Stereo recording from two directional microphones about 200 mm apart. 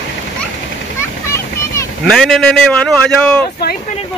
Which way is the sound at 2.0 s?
Centre (ahead or behind).